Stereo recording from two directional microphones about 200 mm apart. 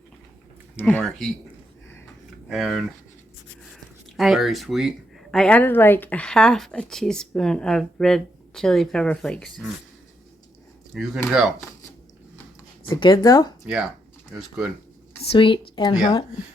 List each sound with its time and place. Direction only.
0.8 s speech: 10° left (ahead or behind)
2.5 s speech: centre (ahead or behind)
4.2 s speech: centre (ahead or behind)
10.9 s speech: centre (ahead or behind)
12.9 s speech: 25° left (ahead or behind)
14.3 s speech: 5° right (ahead or behind)
15.2 s speech: 25° left (ahead or behind)